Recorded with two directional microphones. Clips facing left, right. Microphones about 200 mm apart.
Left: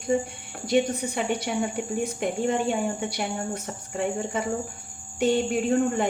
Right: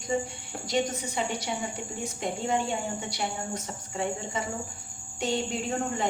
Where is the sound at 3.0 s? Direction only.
55° left (ahead or behind).